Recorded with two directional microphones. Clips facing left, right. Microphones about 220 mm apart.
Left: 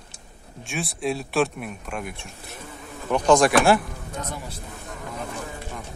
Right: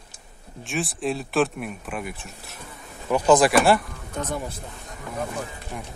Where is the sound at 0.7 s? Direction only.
Centre (ahead or behind).